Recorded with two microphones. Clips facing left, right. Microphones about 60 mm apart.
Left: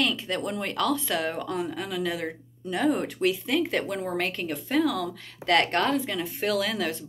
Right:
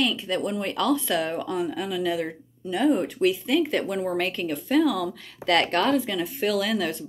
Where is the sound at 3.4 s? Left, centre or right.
Left.